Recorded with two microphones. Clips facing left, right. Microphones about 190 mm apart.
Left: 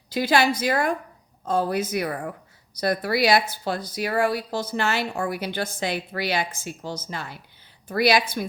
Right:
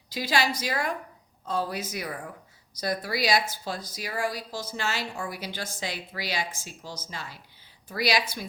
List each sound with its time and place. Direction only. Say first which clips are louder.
0.1 s speech: left 6 dB; 55° left (ahead or behind)